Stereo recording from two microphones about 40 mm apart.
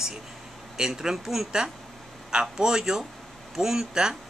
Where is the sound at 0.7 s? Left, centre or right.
Centre.